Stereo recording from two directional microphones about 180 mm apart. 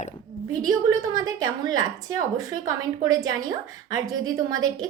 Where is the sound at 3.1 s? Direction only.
20° right (ahead or behind).